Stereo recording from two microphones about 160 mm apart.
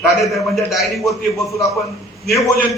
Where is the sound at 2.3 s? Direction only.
20° left (ahead or behind).